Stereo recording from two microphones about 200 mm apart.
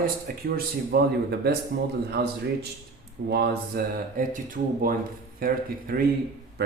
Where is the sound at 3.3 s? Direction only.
50° right (ahead or behind).